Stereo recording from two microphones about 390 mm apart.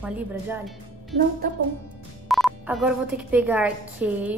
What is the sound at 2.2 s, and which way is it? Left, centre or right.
Speech, centre.